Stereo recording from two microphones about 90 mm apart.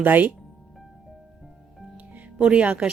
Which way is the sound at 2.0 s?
15° right (ahead or behind).